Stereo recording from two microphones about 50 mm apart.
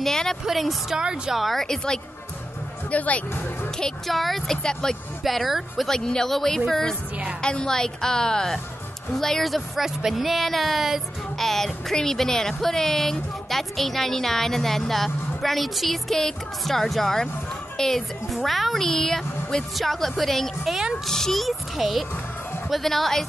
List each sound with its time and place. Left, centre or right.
0.0 s a sound: centre
0.5 s speech: centre
0.9 s speech: centre
1.3 s speech: centre
2.9 s speech: left
4.1 s speech: centre
4.8 s a woman's voice: centre
5.2 s speech: centre
5.9 s a woman's voice: centre